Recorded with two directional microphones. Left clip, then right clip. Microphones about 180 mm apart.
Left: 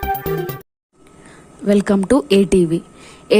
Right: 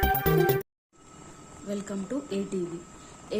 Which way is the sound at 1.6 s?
55° left (ahead or behind).